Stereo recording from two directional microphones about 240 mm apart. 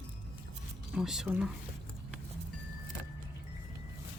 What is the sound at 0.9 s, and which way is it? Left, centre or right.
Speech, centre.